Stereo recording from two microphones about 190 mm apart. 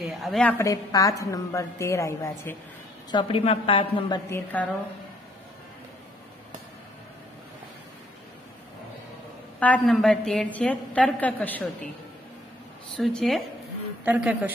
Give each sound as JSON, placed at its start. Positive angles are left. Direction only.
{"t": 0.1, "sound": "a woman's voice", "side_deg": 0}
{"t": 3.1, "sound": "a woman's voice", "side_deg": 25}
{"t": 4.3, "sound": "a woman's voice", "side_deg": 10}
{"t": 9.6, "sound": "a woman's voice", "side_deg": 5}
{"t": 12.9, "sound": "a man's voice", "side_deg": 5}